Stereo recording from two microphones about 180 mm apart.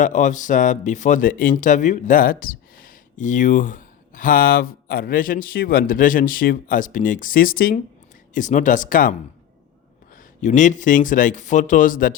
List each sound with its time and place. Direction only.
0.0 s speech: 45° left (ahead or behind)
10.2 s speech: 45° left (ahead or behind)